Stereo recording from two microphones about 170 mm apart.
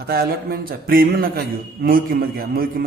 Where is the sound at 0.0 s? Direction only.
65° right (ahead or behind).